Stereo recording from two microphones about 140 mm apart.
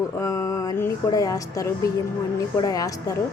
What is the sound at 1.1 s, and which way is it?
A woman's voice, 25° left (ahead or behind).